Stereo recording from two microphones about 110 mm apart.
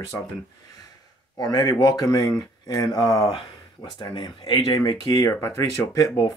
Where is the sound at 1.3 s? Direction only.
40° left (ahead or behind).